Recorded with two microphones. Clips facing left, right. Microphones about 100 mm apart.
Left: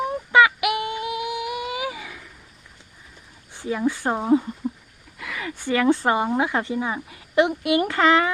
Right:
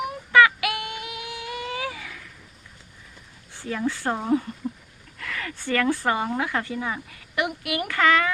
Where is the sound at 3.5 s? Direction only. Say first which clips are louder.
Left 4 dB; 15° left (ahead or behind).